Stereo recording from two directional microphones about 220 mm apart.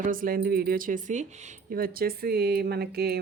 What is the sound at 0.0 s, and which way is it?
Speech, 40° right (ahead or behind).